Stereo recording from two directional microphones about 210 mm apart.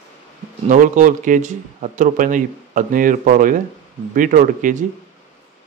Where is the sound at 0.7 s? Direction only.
35° right (ahead or behind).